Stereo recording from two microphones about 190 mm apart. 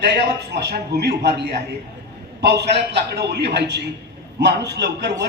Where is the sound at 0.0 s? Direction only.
60° right (ahead or behind).